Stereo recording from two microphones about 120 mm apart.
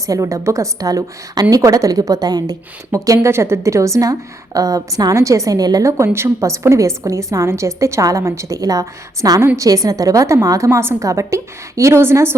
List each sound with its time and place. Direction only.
0.1 s a woman's voice: 30° right (ahead or behind)